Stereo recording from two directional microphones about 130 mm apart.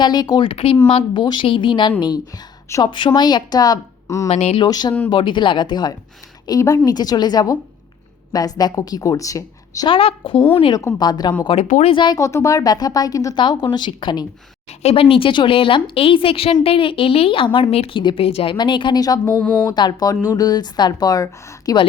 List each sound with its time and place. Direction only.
0.0 s speech: 30° left (ahead or behind)
0.5 s a woman's voice: 45° left (ahead or behind); by 4.3 s 25° left (ahead or behind)
4.3 s speech: 60° left (ahead or behind)
4.6 s a woman's voice: 30° left (ahead or behind)
9.9 s a woman's voice: 45° left (ahead or behind)
10.8 s a woman's voice: 30° left (ahead or behind)
12.1 s a woman's voice: 25° left (ahead or behind)
13.4 s speech: 35° left (ahead or behind)
14.8 s a woman's voice: 50° left (ahead or behind)
18.5 s speech: 35° left (ahead or behind)
19.4 s speech: 10° left (ahead or behind)
19.6 s a woman's voice: 30° left (ahead or behind)